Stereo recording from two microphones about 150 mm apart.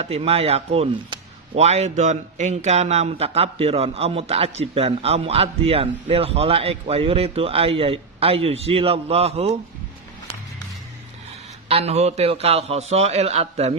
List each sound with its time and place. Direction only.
0.0 s speech: 40° right (ahead or behind)
11.7 s a man's voice: 45° right (ahead or behind)